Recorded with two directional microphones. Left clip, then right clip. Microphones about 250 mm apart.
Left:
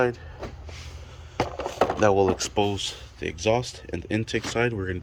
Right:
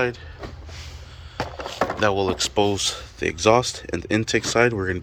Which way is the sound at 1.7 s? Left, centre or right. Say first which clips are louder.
Left 1 dB; left.